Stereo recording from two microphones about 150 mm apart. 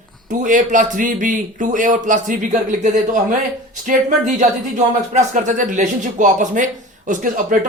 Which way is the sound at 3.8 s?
60° right (ahead or behind).